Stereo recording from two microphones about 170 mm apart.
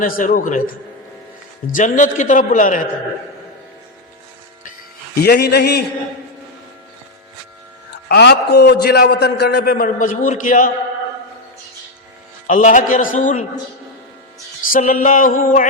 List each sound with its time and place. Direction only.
0.0 s a man's voice: 50° left (ahead or behind)
1.6 s a man's voice: 50° left (ahead or behind)
5.2 s a man's voice: 70° left (ahead or behind)
8.0 s a man's voice: 70° left (ahead or behind); by 10.7 s 50° left (ahead or behind)
12.5 s a man's voice: 50° left (ahead or behind)
14.7 s a man's voice: 55° left (ahead or behind)